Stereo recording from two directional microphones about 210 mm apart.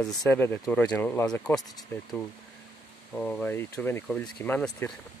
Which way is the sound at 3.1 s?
5° left (ahead or behind).